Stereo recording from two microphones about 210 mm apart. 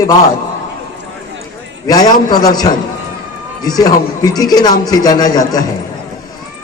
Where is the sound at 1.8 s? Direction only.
20° left (ahead or behind).